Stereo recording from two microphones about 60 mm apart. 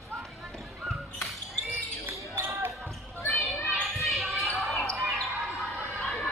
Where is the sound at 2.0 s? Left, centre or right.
Right.